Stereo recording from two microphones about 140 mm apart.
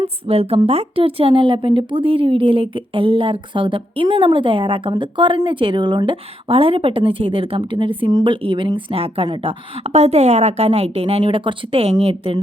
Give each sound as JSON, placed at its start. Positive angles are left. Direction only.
{"t": 0.0, "sound": "a woman's voice", "side_deg": -45}